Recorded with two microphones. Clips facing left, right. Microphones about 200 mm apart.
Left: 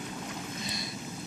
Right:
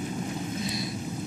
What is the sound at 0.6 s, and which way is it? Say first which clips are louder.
Vehicle: right 7 dB; centre (ahead or behind).